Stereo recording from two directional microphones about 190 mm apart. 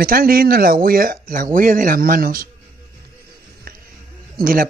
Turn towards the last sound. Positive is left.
turn(degrees=-50)  # may be behind; listen again after turning